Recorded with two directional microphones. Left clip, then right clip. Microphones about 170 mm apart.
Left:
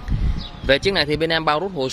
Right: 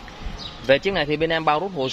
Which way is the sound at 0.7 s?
25° left (ahead or behind).